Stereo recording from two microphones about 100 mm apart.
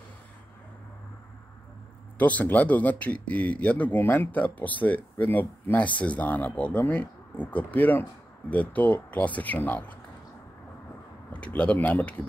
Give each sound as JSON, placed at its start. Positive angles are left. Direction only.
{"t": 2.1, "sound": "speech", "side_deg": 15}
{"t": 11.3, "sound": "speech", "side_deg": 15}